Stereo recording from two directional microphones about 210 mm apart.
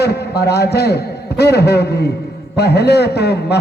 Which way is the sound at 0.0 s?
50° left (ahead or behind).